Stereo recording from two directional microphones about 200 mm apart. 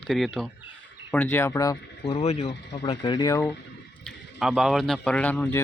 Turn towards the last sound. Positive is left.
turn(degrees=10)  # may be behind; listen again after turning